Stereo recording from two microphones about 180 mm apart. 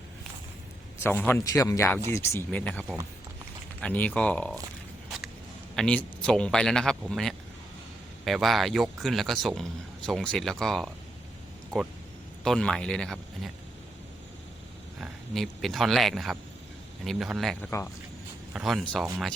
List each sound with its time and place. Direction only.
1.0 s speech: 10° left (ahead or behind)
5.0 s a sound: centre (ahead or behind)
5.7 s speech: 5° left (ahead or behind)
15.0 s speech: centre (ahead or behind)